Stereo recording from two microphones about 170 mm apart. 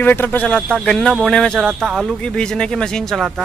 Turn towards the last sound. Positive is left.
turn(degrees=0)  # may be behind; listen again after turning